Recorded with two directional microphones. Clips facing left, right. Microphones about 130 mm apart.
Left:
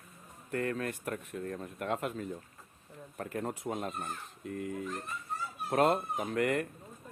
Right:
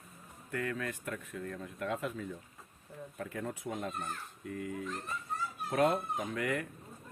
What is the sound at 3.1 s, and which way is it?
Speech, 45° left (ahead or behind).